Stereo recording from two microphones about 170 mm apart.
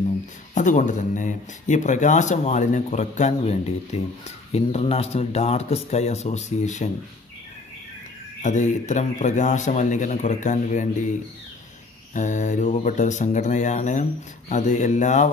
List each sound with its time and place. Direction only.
0.6 s speech: 45° left (ahead or behind)
8.4 s speech: 45° left (ahead or behind)
12.1 s speech: 45° left (ahead or behind)